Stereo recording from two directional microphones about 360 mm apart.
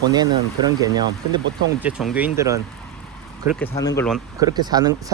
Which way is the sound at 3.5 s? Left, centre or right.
Centre.